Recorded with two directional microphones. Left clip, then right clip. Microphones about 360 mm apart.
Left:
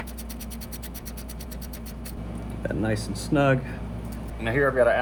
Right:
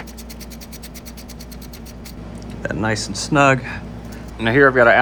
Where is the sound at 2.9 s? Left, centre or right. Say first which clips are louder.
Right 9 dB; right.